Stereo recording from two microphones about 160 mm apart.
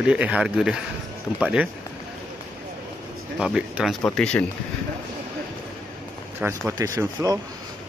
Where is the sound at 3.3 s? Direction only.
5° right (ahead or behind).